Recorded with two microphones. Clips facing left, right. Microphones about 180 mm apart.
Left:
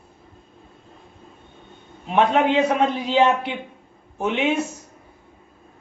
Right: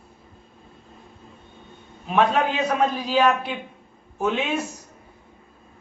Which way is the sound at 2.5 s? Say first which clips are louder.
Left 3 dB; 25° left (ahead or behind).